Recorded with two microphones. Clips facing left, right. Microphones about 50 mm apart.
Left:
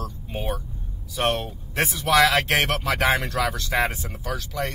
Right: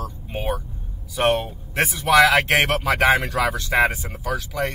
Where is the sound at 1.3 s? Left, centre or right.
Centre.